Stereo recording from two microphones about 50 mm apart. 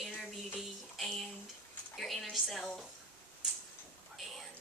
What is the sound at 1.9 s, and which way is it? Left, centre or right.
Speech, centre.